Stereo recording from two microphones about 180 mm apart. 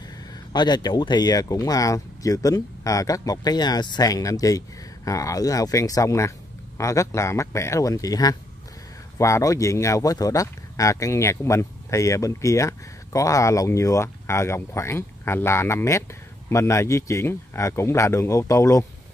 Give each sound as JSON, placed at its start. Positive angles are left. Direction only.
{"t": 0.3, "sound": "speech", "side_deg": 25}